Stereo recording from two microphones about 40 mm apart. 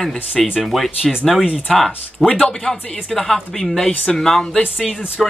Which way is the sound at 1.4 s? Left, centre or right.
Right.